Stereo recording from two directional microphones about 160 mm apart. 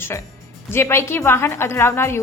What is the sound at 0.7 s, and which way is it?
A woman's voice, 15° left (ahead or behind).